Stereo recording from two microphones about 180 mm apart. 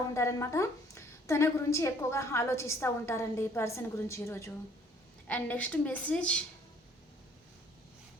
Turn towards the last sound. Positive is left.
turn(degrees=5)  # may be behind; listen again after turning